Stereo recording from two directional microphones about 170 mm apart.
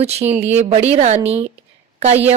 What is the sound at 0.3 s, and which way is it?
A woman's voice, 40° right (ahead or behind).